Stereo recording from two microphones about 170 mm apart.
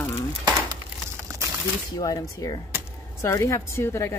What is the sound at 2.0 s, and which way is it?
Speech, 20° left (ahead or behind).